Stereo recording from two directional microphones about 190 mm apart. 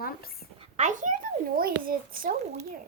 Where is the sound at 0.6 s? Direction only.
40° right (ahead or behind).